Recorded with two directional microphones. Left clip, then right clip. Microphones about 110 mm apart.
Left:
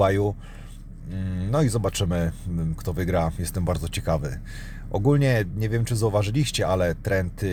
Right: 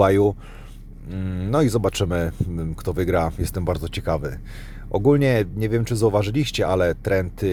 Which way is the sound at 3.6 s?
20° right (ahead or behind).